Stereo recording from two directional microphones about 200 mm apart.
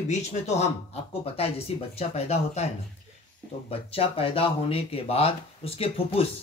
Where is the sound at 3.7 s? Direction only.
30° left (ahead or behind).